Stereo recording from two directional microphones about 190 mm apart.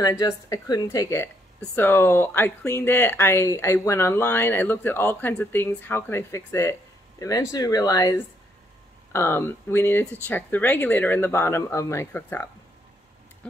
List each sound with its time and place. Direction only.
0.0 s a woman's voice: 15° left (ahead or behind)